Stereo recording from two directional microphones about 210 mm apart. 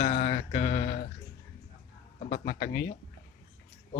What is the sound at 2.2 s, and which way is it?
Mantra, 40° left (ahead or behind).